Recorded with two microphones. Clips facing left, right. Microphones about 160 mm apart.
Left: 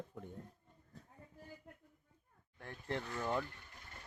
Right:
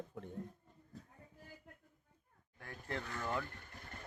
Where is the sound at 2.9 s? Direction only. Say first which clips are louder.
Left 2 dB; 15° left (ahead or behind).